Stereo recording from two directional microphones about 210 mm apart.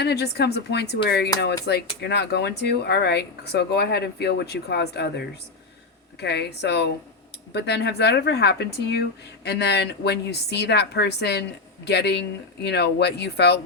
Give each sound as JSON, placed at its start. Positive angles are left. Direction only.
{"t": 0.0, "sound": "speech", "side_deg": 50}